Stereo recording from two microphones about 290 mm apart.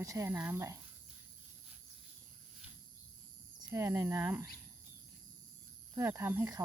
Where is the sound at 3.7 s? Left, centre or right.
Centre.